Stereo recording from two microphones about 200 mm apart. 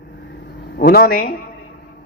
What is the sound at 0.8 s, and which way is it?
Speech, 50° left (ahead or behind).